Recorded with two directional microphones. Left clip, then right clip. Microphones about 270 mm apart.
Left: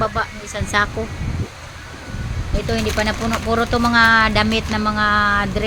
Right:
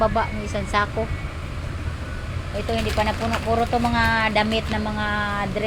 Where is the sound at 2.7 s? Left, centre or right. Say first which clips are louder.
Left 3 dB; left.